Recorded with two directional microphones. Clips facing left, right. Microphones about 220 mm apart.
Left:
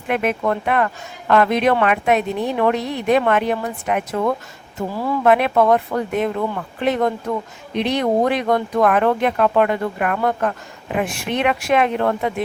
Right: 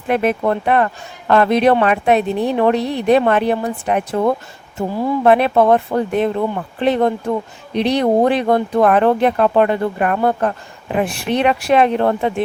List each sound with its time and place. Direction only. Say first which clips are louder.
0.1 s speech: right 3 dB; 35° right (ahead or behind)